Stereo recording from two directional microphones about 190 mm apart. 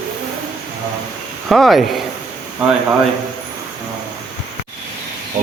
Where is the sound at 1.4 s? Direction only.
Centre (ahead or behind).